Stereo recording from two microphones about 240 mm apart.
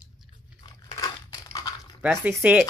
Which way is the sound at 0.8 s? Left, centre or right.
Centre.